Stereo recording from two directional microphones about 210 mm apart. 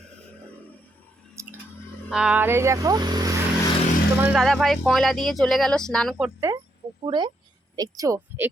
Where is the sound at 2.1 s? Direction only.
5° right (ahead or behind).